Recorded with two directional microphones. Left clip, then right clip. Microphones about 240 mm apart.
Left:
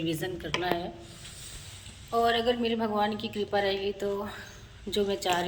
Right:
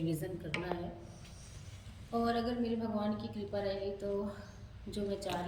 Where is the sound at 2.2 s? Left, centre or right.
Left.